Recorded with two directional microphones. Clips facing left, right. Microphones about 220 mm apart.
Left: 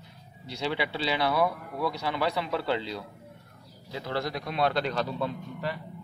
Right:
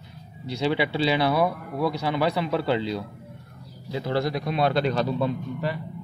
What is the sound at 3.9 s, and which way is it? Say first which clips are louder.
Speech: right 6 dB; 25° right (ahead or behind).